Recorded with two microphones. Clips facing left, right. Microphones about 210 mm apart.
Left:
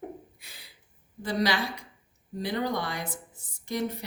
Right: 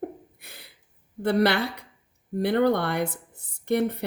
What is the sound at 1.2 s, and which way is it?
Speech, 60° right (ahead or behind).